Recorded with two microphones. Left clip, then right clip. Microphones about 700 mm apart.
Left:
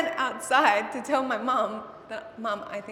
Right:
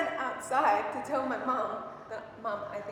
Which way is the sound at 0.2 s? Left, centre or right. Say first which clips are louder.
Left 9 dB; left.